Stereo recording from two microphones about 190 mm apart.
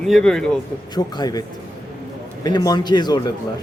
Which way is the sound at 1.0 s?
20° left (ahead or behind).